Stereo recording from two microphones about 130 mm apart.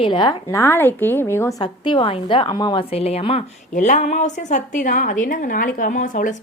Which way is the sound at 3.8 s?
70° left (ahead or behind).